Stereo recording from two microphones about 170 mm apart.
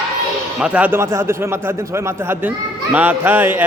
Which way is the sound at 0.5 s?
5° right (ahead or behind).